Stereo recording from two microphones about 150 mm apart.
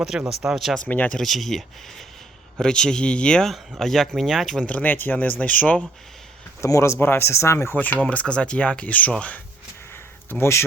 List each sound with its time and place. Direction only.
0.0 s speech: 5° right (ahead or behind)
6.6 s speech: 20° left (ahead or behind)
9.9 s a sound: 15° left (ahead or behind)